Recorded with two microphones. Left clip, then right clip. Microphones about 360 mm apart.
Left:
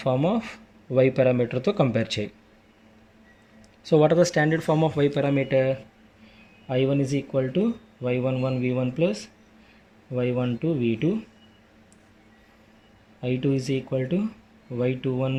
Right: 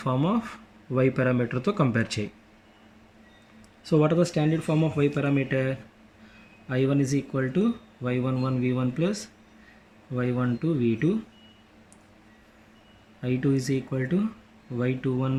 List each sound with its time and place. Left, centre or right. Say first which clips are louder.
0.0 s speech: left 3 dB; centre
3.8 s speech: left 4 dB; centre
13.2 s speech: left 1 dB; centre